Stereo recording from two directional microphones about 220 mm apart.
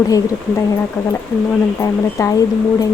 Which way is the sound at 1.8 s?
15° left (ahead or behind).